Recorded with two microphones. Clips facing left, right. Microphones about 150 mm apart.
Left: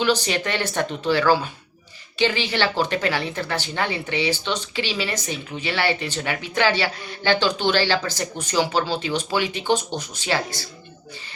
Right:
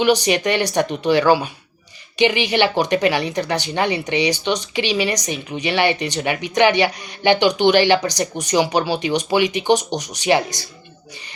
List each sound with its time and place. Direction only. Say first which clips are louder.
0.0 s speech: right 5 dB; 15° right (ahead or behind)